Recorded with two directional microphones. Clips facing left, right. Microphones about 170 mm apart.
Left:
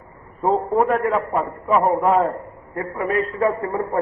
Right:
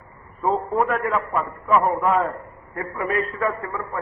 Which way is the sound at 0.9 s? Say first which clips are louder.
Left 4 dB; 30° left (ahead or behind).